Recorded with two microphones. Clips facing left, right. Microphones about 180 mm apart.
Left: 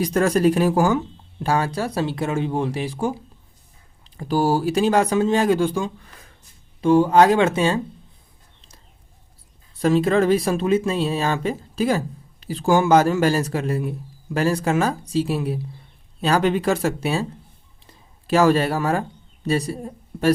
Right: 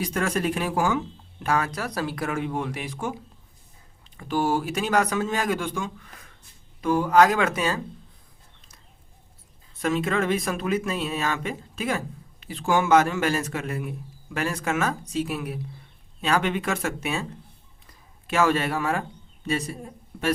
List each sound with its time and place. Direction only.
0.0 s speech: 40° left (ahead or behind)
9.8 s speech: 35° left (ahead or behind)